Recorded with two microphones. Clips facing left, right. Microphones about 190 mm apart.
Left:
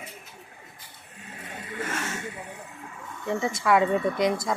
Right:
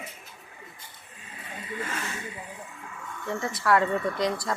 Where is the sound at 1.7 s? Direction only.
45° left (ahead or behind).